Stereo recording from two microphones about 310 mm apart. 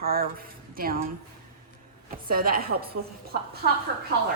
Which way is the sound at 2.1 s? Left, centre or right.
Right.